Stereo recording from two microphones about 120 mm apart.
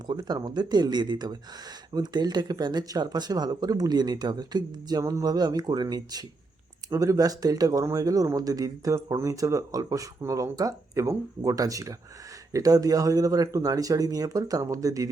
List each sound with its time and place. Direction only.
0.1 s speech: 35° right (ahead or behind)